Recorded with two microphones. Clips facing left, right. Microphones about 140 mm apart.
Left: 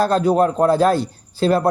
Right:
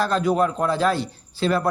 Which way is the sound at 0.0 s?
40° left (ahead or behind).